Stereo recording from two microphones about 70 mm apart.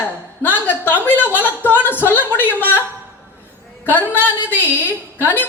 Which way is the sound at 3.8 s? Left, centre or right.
Left.